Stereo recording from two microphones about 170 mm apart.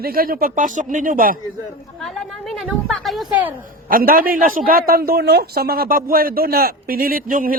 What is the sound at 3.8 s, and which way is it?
A man's voice, 55° right (ahead or behind).